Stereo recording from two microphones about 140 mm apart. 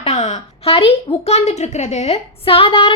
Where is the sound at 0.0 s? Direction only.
50° left (ahead or behind).